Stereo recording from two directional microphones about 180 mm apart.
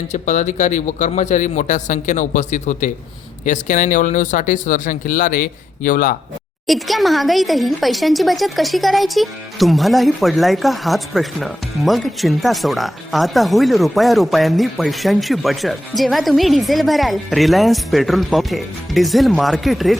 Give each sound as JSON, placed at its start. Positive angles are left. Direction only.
{"t": 0.1, "sound": "speech", "side_deg": 40}
{"t": 6.7, "sound": "speech", "side_deg": 0}